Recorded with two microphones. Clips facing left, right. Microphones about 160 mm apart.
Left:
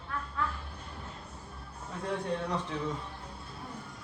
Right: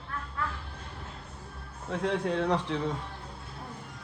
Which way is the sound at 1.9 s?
85° right.